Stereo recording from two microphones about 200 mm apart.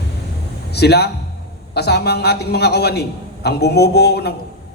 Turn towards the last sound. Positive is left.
turn(degrees=55)  # may be behind; listen again after turning